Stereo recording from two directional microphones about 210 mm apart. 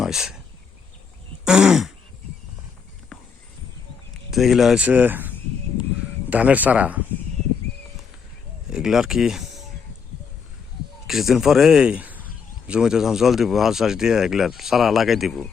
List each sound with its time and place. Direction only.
0.0 s speech: centre (ahead or behind)
1.5 s speech: 5° right (ahead or behind)
4.3 s speech: centre (ahead or behind)
6.3 s speech: 5° right (ahead or behind)
8.7 s speech: centre (ahead or behind)
11.0 s speech: centre (ahead or behind)